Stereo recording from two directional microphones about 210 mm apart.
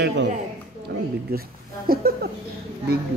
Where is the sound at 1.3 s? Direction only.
45° right (ahead or behind).